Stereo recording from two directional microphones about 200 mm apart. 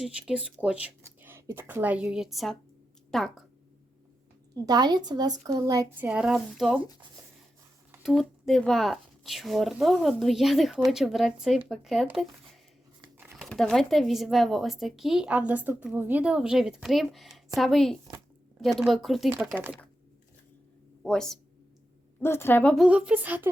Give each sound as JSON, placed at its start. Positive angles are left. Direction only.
{"t": 0.0, "sound": "speech", "side_deg": -5}
{"t": 4.5, "sound": "speech", "side_deg": -20}
{"t": 8.0, "sound": "speech", "side_deg": 0}
{"t": 13.0, "sound": "a sound", "side_deg": -10}
{"t": 13.3, "sound": "speech", "side_deg": 0}
{"t": 21.0, "sound": "speech", "side_deg": 5}